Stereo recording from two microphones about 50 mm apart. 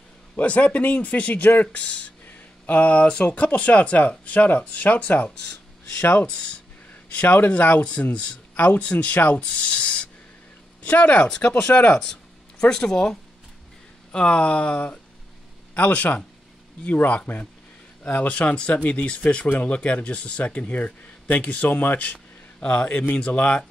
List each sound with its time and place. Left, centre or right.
0.4 s speech: left
2.2 s a sound: left
3.3 s speech: left
6.2 s speech: centre
7.1 s speech: left